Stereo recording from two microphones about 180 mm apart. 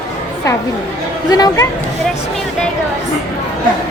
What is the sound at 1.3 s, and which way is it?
Speech, 20° left (ahead or behind).